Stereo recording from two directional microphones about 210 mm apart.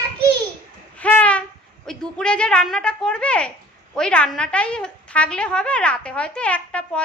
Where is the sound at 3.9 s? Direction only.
5° left (ahead or behind).